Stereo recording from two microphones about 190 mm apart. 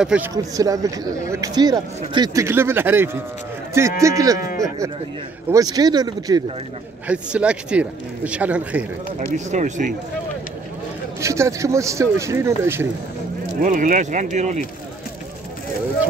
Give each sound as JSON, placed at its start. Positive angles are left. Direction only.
{"t": 0.0, "sound": "speech", "side_deg": -5}
{"t": 0.6, "sound": "speech", "side_deg": -20}
{"t": 7.1, "sound": "speech", "side_deg": -5}
{"t": 9.5, "sound": "speech", "side_deg": -40}
{"t": 11.1, "sound": "speech", "side_deg": -15}
{"t": 13.6, "sound": "speech", "side_deg": -45}